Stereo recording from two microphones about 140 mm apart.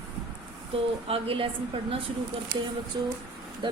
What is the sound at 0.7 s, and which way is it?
Speech, 40° right (ahead or behind).